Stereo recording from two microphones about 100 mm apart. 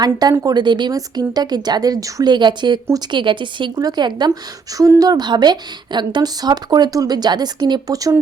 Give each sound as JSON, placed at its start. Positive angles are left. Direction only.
{"t": 0.0, "sound": "a woman's voice", "side_deg": -40}
{"t": 2.3, "sound": "a woman's voice", "side_deg": -50}
{"t": 4.8, "sound": "a woman's voice", "side_deg": -35}